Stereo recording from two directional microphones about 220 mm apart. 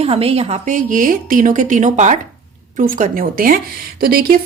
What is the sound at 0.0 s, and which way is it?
A woman's voice, 25° right (ahead or behind).